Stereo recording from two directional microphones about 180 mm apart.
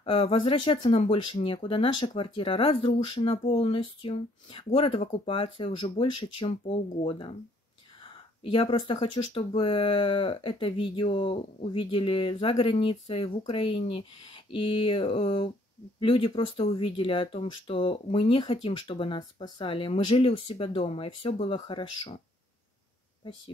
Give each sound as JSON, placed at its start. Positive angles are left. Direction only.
{"t": 0.0, "sound": "speech", "side_deg": 30}